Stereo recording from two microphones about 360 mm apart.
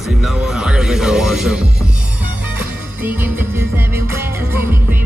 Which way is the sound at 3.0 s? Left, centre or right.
Centre.